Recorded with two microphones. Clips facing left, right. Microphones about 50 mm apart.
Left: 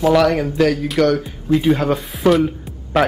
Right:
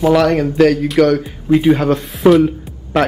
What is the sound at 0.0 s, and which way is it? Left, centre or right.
Speech, centre.